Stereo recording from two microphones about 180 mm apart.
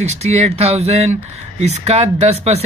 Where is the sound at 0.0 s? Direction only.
35° right (ahead or behind).